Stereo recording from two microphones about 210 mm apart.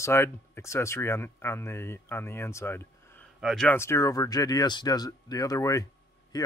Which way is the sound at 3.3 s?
Centre (ahead or behind).